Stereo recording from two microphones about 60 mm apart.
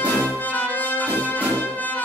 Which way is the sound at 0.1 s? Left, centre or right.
Left.